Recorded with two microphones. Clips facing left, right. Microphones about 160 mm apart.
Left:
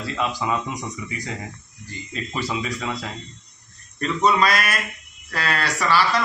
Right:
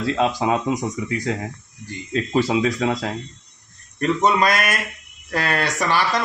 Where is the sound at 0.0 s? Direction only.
85° right.